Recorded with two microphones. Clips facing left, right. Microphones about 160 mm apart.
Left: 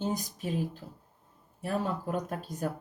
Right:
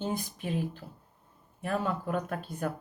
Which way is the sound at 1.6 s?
35° left (ahead or behind).